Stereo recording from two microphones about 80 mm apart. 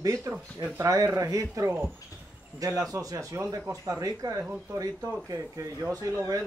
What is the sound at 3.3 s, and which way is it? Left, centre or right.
Speech, right.